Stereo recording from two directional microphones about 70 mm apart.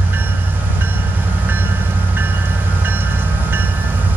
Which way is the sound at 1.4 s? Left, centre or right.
Right.